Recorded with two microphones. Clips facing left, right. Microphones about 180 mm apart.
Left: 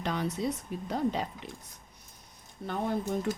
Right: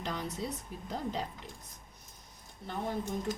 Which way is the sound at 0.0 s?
65° left (ahead or behind).